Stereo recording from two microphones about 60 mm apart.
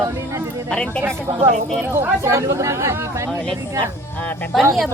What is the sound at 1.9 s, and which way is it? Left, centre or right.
Speech, right.